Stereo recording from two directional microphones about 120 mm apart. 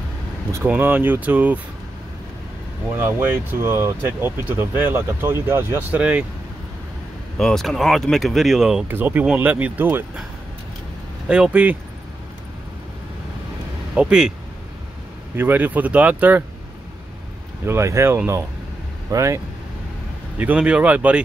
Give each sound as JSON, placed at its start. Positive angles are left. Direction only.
{"t": 0.7, "sound": "speech", "side_deg": -15}
{"t": 3.0, "sound": "speech", "side_deg": -15}
{"t": 7.3, "sound": "speech", "side_deg": 5}
{"t": 8.8, "sound": "speech", "side_deg": -15}
{"t": 11.2, "sound": "speech", "side_deg": -10}
{"t": 13.9, "sound": "speech", "side_deg": -5}
{"t": 15.3, "sound": "speech", "side_deg": -15}
{"t": 17.6, "sound": "speech", "side_deg": -25}
{"t": 20.3, "sound": "speech", "side_deg": -10}